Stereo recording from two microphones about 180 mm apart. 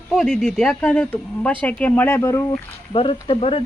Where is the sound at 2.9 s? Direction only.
30° left (ahead or behind).